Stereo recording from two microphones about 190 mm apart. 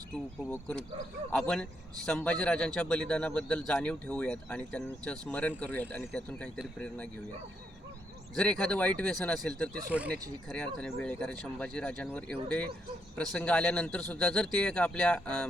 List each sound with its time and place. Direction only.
0.5 s a man's voice: 10° left (ahead or behind)
8.4 s a man's voice: 5° left (ahead or behind)